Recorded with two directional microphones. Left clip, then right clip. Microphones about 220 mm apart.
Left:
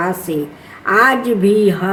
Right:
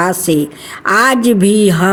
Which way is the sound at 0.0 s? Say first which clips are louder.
Right 6 dB; 50° right (ahead or behind).